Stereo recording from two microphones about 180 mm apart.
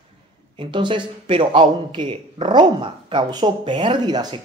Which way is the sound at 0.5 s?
25° right (ahead or behind).